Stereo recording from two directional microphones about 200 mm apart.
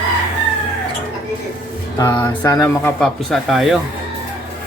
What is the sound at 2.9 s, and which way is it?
Speech, centre (ahead or behind).